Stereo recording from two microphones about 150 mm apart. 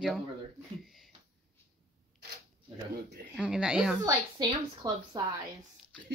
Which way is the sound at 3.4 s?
5° right (ahead or behind).